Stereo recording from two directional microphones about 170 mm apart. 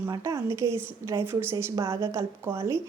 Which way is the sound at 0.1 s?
20° right (ahead or behind).